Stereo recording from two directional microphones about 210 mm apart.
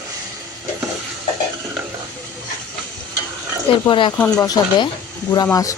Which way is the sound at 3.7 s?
25° left (ahead or behind).